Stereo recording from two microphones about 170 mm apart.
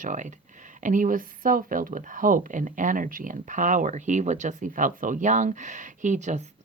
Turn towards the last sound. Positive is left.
turn(degrees=-45)  # may be behind; listen again after turning